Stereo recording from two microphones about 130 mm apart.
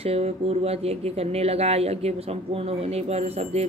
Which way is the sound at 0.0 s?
50° right (ahead or behind).